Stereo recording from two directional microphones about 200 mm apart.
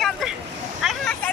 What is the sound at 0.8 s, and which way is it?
Vehicle, centre (ahead or behind).